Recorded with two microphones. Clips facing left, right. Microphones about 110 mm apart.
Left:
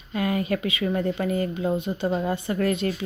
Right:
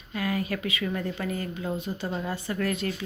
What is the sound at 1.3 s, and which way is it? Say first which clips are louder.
A woman's voice: left 7 dB; 25° left (ahead or behind).